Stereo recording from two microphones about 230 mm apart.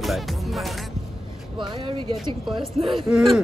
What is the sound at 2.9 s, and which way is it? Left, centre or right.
Cattle, centre.